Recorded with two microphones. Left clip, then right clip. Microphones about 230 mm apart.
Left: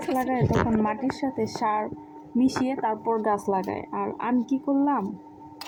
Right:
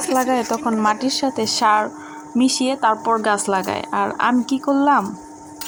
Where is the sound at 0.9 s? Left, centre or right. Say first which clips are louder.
Right 8 dB; centre.